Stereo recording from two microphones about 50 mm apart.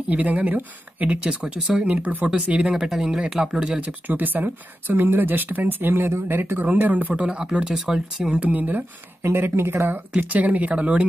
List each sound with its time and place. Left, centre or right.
0.1 s speech: right
1.2 s speech: centre
2.3 s speech: centre
3.8 s speech: right
6.7 s speech: right
7.2 s speech: centre
8.4 s speech: right
9.2 s speech: right
10.1 s speech: right
10.8 s speech: right